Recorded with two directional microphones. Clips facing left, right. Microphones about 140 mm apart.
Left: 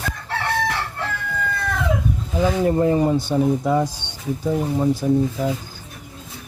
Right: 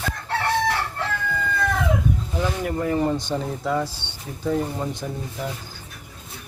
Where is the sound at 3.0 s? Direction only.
10° left (ahead or behind).